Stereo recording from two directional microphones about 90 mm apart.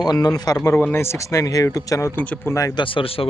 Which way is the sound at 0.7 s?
25° left (ahead or behind).